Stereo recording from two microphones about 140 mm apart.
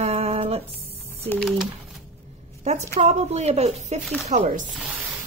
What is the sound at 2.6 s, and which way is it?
A woman's voice, 50° right (ahead or behind).